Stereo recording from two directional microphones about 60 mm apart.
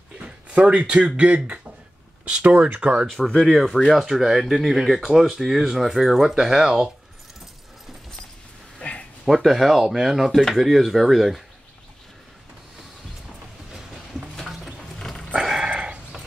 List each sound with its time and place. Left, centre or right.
0.5 s speech: right
3.3 s speech: centre
8.7 s a sound: centre
9.2 s speech: centre
13.9 s a sound: centre
15.0 s dog: centre
15.3 s dog: centre